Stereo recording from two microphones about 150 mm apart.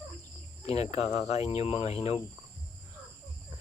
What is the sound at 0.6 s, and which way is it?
Speech, 45° left (ahead or behind).